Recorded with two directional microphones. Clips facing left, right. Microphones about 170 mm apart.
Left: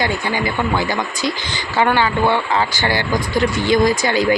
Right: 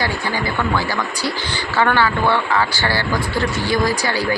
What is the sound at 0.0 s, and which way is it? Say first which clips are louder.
Speech: left 2 dB; 20° left (ahead or behind).